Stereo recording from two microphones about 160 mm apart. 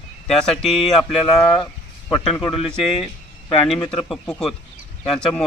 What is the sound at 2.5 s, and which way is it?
Speech, 35° left (ahead or behind).